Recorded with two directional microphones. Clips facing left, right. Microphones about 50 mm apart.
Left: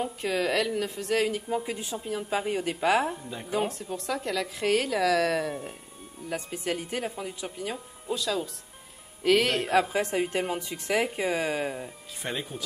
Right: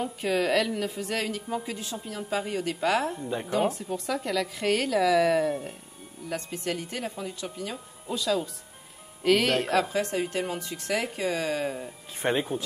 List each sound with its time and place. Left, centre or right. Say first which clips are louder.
0.0 s a woman's voice: right 1 dB; centre
1.2 s a woman's voice: left 3 dB; centre
3.6 s a woman's voice: right 3 dB; centre
6.3 s speech: even; centre
7.7 s a woman's voice: left 1 dB; centre
9.9 s a woman's voice: left 1 dB; left
12.2 s speech: right 7 dB; right